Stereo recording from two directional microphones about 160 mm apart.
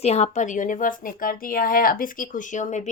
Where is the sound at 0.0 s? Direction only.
45° left (ahead or behind).